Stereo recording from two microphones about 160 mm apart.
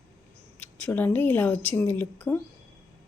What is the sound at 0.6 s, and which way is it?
A woman's voice, 10° left (ahead or behind).